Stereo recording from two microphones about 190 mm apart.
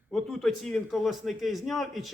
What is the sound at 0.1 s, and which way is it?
A man's voice, centre (ahead or behind).